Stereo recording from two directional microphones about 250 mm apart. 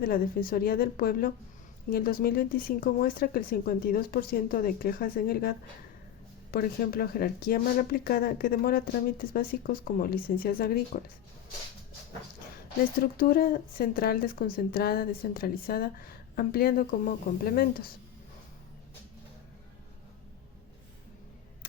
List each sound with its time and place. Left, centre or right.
0.0 s a woman's voice: left
13.1 s a woman's voice: left